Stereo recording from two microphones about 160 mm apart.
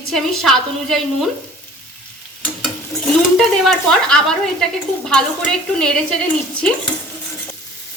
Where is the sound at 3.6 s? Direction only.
5° left (ahead or behind).